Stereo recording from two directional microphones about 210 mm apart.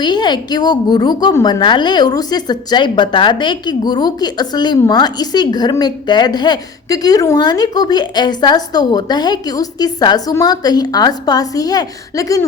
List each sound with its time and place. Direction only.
0.0 s a woman's voice: 20° left (ahead or behind)